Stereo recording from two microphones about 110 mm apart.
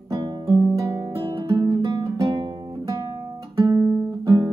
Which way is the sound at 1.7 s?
35° right (ahead or behind).